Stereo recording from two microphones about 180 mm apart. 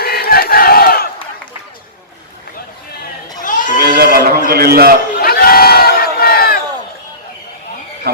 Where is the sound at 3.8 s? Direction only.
60° right (ahead or behind).